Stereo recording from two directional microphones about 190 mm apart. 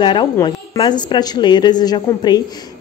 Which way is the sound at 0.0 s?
25° left (ahead or behind).